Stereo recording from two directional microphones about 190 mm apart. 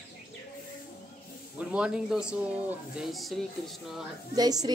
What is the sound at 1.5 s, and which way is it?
A man's voice, 5° right (ahead or behind).